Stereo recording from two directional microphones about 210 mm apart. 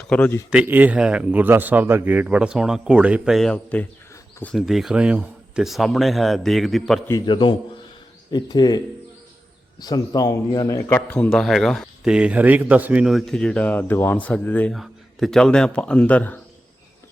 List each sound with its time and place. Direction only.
0.0 s speech: 5° left (ahead or behind)
0.5 s speech: 10° right (ahead or behind); by 4.5 s 10° left (ahead or behind)
4.5 s speech: centre (ahead or behind)
7.1 s speech: 20° left (ahead or behind)
9.8 s speech: 20° left (ahead or behind)